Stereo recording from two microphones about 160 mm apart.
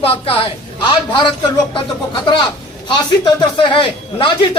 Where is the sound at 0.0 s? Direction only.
35° left (ahead or behind).